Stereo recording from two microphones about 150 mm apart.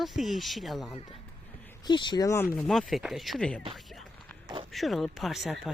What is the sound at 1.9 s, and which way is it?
Speech, 30° left (ahead or behind).